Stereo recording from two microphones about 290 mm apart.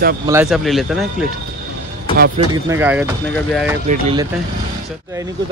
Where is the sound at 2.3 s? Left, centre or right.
Centre.